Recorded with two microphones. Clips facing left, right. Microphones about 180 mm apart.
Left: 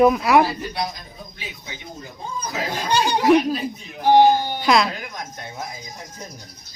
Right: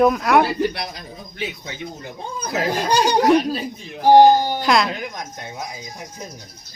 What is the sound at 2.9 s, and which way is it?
Speech, 40° right (ahead or behind).